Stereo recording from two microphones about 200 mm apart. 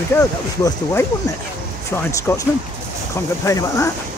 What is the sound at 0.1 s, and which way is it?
Speech, 15° left (ahead or behind).